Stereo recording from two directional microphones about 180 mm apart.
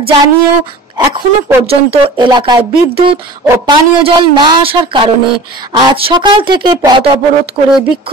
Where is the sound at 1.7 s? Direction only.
25° right (ahead or behind).